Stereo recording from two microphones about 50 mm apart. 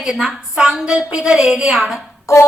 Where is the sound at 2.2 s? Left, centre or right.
Left.